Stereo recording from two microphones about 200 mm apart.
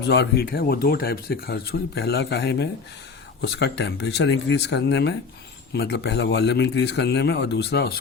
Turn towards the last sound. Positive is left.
turn(degrees=55)  # may be behind; listen again after turning